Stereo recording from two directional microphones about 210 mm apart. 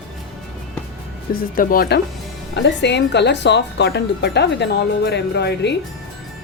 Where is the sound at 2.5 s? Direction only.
55° left (ahead or behind).